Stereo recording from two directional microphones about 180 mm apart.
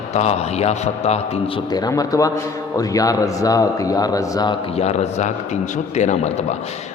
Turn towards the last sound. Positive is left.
turn(degrees=40)  # may be behind; listen again after turning